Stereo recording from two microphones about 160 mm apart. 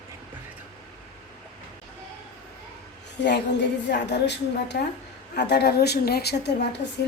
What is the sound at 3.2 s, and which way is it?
A woman's voice, 90° left.